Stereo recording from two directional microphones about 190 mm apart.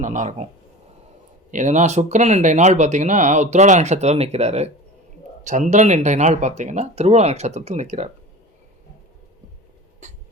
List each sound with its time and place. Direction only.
0.0 s speech: 40° right (ahead or behind)
1.5 s speech: 40° right (ahead or behind)